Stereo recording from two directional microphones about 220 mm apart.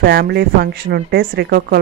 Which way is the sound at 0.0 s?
45° right (ahead or behind).